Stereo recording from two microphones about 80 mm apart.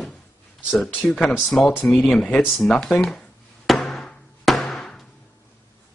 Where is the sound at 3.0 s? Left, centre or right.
Centre.